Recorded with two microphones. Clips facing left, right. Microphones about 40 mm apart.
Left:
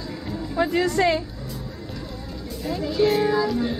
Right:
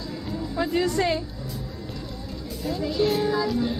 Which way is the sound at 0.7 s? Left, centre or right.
Centre.